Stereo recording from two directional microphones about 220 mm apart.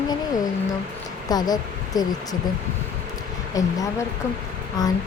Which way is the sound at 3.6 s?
15° left (ahead or behind).